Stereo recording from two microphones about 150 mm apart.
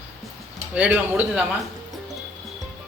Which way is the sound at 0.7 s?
10° right (ahead or behind).